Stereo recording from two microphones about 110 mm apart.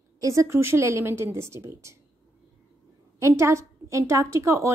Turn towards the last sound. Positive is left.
turn(degrees=-25)  # may be behind; listen again after turning